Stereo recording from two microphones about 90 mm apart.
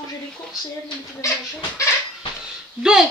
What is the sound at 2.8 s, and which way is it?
Speech, 10° right (ahead or behind).